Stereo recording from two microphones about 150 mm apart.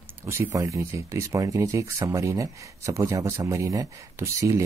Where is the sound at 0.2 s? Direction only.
20° right (ahead or behind).